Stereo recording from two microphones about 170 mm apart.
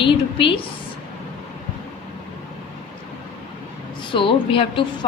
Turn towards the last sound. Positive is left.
turn(degrees=30)  # may be behind; listen again after turning